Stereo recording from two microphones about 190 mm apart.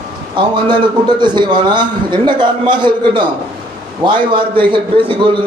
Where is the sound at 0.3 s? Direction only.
25° right (ahead or behind).